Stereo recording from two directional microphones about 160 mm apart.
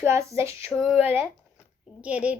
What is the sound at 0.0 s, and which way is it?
Speech, 15° right (ahead or behind).